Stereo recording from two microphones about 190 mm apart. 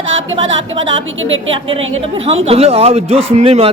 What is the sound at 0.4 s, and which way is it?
Speech, 85° right.